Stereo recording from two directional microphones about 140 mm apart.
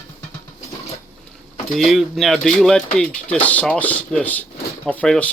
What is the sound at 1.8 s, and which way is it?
Speech, centre (ahead or behind).